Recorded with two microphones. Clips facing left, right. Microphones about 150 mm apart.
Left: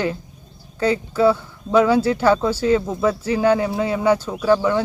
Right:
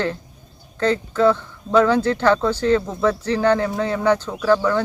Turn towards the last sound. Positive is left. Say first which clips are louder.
# left 1 dB
turn(degrees=15)  # may be behind; listen again after turning